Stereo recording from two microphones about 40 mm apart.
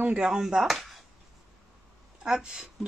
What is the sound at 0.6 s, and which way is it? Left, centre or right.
Speech, centre.